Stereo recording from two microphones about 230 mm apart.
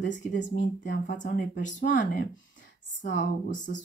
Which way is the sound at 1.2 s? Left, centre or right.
Left.